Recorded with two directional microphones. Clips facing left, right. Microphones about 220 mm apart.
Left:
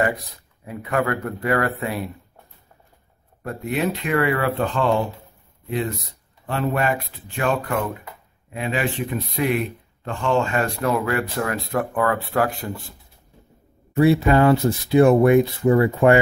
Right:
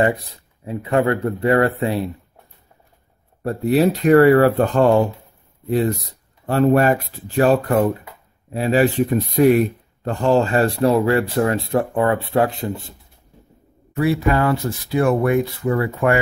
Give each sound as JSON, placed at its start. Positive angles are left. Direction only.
{"t": 0.7, "sound": "speech", "side_deg": -25}
{"t": 3.4, "sound": "speech", "side_deg": -35}
{"t": 13.9, "sound": "speech", "side_deg": 25}